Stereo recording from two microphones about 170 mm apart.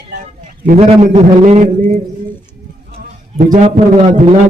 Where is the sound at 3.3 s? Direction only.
50° right (ahead or behind).